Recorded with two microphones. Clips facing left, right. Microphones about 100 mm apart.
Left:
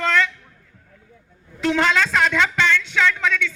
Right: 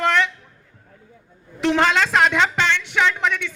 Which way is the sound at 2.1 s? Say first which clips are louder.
Right 2 dB; 30° right (ahead or behind).